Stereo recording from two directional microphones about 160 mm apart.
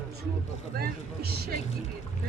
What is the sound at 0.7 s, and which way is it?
Speech, 75° right (ahead or behind).